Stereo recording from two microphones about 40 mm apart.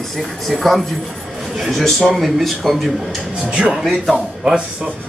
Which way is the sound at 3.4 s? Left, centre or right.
Right.